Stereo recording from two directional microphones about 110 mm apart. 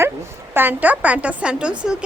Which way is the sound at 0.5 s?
20° right (ahead or behind).